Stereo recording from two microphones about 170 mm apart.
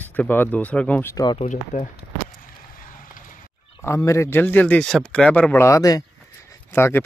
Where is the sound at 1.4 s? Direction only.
45° left (ahead or behind).